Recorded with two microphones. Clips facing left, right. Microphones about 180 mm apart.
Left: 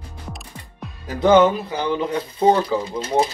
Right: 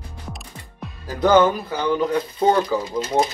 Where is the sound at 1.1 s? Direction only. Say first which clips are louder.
Left 2 dB; 25° left (ahead or behind).